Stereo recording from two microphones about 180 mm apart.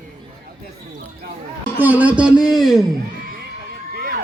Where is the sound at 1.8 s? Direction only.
10° right (ahead or behind).